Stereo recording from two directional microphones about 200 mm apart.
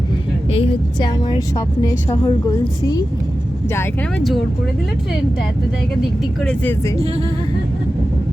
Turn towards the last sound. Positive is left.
turn(degrees=5)  # may be behind; listen again after turning